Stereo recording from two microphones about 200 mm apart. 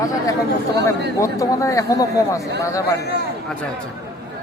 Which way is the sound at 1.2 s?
15° left (ahead or behind).